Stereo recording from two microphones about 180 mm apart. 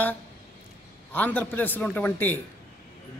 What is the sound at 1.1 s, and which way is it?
Speech, 10° left (ahead or behind).